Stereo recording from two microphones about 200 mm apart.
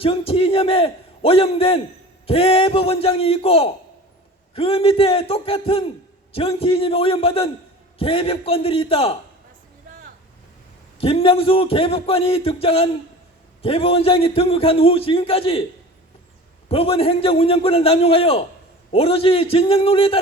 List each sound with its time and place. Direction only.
0.0 s a man's voice: 30° left (ahead or behind)
11.0 s a man's voice: 30° left (ahead or behind)
16.6 s a man's voice: 30° left (ahead or behind)